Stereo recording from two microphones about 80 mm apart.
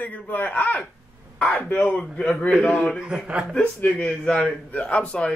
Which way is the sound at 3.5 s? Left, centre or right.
Centre.